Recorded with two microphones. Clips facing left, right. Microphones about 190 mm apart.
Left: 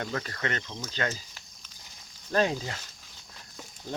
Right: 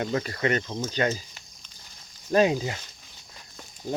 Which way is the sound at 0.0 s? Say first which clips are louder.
Right 6 dB; 15° right (ahead or behind).